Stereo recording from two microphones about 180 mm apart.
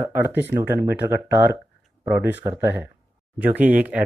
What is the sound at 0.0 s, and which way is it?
Speech, 10° right (ahead or behind).